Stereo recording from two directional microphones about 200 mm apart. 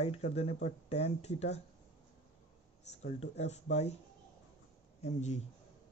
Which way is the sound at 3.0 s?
35° left (ahead or behind).